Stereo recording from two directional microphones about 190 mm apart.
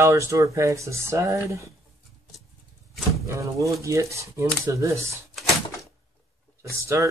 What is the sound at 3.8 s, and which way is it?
Speech, 15° right (ahead or behind).